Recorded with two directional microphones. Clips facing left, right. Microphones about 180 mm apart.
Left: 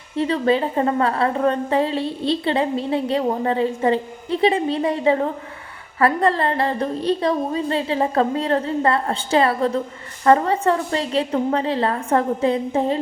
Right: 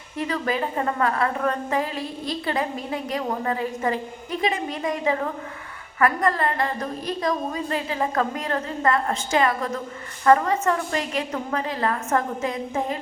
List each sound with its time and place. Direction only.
0.2 s a woman's voice: 30° left (ahead or behind)